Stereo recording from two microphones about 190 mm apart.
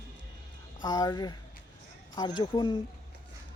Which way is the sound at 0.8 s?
20° left (ahead or behind).